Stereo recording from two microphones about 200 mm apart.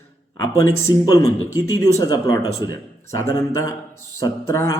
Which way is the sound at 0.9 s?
15° left (ahead or behind).